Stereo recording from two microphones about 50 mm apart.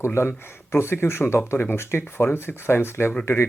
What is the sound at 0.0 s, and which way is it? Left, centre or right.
Speech, left.